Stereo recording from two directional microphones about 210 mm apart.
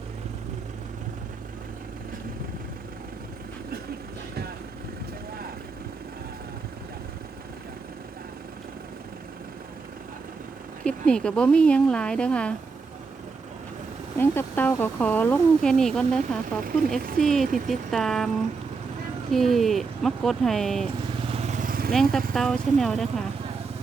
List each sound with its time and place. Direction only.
10.8 s a woman's voice: 5° left (ahead or behind)
14.2 s speech: 10° left (ahead or behind)
16.6 s speech: 45° right (ahead or behind)
17.2 s a woman's voice: centre (ahead or behind)
19.3 s a woman's voice: centre (ahead or behind)
21.2 s vehicle: 30° right (ahead or behind)
22.3 s a woman's voice: 5° left (ahead or behind)